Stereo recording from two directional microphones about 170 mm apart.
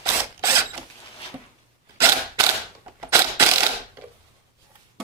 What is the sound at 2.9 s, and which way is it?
Ratchet, 20° right (ahead or behind).